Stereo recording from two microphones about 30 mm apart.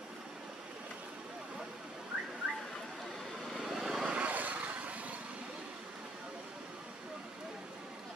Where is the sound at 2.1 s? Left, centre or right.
Right.